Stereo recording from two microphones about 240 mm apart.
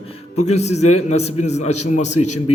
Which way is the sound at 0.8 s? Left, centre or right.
Left.